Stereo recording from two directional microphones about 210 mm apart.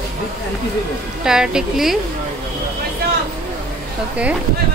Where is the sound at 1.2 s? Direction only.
5° right (ahead or behind).